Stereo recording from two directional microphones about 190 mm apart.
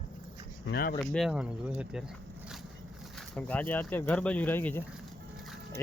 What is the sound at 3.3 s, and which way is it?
Speech, 5° left (ahead or behind).